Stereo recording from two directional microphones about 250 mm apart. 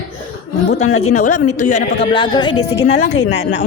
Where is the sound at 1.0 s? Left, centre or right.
Left.